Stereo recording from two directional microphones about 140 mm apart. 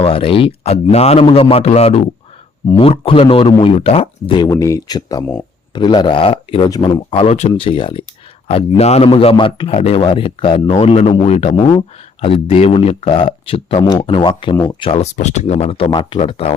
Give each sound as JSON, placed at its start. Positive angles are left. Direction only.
{"t": 0.0, "sound": "a man's voice", "side_deg": 40}
{"t": 4.4, "sound": "speech", "side_deg": 20}
{"t": 6.7, "sound": "speech", "side_deg": 30}
{"t": 7.1, "sound": "a man's voice", "side_deg": 45}
{"t": 7.5, "sound": "speech", "side_deg": 40}
{"t": 8.8, "sound": "a man's voice", "side_deg": 50}
{"t": 9.0, "sound": "speech", "side_deg": 35}
{"t": 11.5, "sound": "a man's voice", "side_deg": 30}
{"t": 16.1, "sound": "a man's voice", "side_deg": 45}